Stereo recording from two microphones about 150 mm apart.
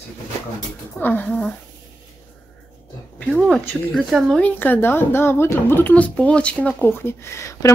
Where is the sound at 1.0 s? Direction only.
10° left (ahead or behind).